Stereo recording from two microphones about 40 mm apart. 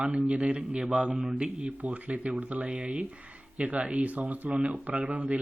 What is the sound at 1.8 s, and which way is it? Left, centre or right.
A man's voice, right.